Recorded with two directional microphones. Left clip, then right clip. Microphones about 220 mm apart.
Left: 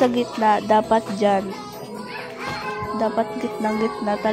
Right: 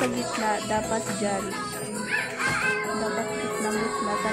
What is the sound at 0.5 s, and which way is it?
Music, 25° left (ahead or behind).